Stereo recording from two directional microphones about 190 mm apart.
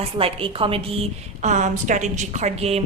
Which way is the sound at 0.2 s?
30° right (ahead or behind).